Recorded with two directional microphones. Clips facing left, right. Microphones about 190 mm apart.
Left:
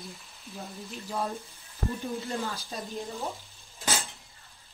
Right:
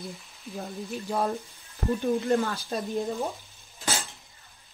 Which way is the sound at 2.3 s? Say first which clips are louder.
Right 8 dB; 55° right (ahead or behind).